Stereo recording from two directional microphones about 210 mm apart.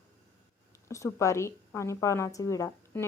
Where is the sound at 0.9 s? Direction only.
15° left (ahead or behind).